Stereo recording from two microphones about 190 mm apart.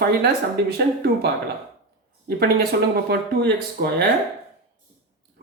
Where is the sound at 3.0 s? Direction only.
55° right (ahead or behind).